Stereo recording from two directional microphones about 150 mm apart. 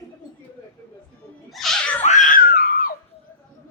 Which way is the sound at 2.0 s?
55° left (ahead or behind).